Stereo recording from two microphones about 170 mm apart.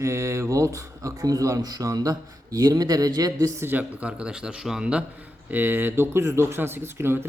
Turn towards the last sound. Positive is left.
turn(degrees=-15)  # may be behind; listen again after turning